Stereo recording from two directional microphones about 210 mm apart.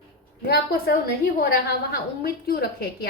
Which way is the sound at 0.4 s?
50° left (ahead or behind).